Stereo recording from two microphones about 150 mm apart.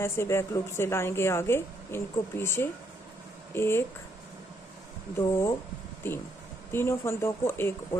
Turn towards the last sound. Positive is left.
turn(degrees=15)  # may be behind; listen again after turning